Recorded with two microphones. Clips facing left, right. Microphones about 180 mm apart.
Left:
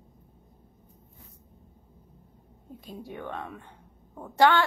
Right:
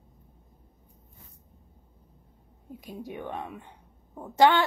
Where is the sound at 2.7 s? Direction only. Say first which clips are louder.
Right 2 dB; 15° right (ahead or behind).